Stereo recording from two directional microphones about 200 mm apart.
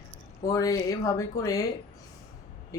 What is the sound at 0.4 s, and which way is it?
Speech, 15° left (ahead or behind).